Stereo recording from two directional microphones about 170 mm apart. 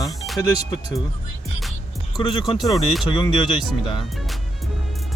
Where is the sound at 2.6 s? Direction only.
Centre (ahead or behind).